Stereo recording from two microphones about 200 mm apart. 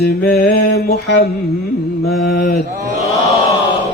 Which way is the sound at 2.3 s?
50° left (ahead or behind).